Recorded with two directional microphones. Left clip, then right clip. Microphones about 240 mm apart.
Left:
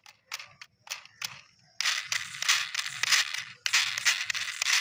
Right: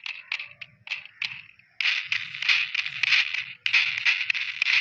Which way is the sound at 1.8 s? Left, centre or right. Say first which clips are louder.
Right 4 dB; left.